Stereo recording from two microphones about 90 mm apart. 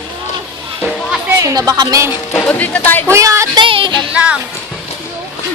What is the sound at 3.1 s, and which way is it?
Speech, 35° right (ahead or behind).